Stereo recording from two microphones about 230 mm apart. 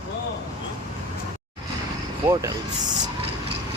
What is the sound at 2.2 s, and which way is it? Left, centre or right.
Speech, centre.